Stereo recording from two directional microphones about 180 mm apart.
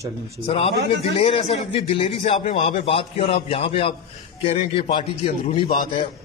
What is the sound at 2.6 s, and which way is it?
A man's voice, 30° left (ahead or behind).